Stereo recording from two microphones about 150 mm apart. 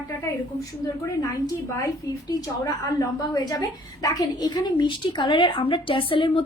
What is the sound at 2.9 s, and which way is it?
A woman's voice, 25° left (ahead or behind).